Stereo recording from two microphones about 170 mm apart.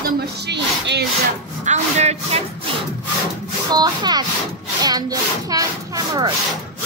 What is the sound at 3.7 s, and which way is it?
Speech, 25° right (ahead or behind).